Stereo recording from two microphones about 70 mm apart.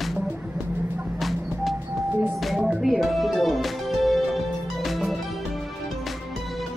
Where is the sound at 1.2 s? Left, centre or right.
Centre.